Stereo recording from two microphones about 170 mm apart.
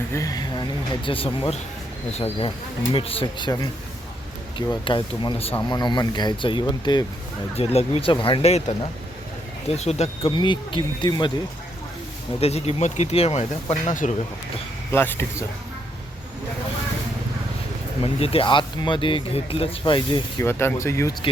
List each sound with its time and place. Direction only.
0.1 s speech: 20° left (ahead or behind)
1.0 s speech: 30° left (ahead or behind)
7.5 s speech: 35° left (ahead or behind)
12.4 s speech: 35° left (ahead or behind)
14.9 s speech: 10° left (ahead or behind)
18.0 s speech: 35° left (ahead or behind)
20.4 s speech: 15° left (ahead or behind)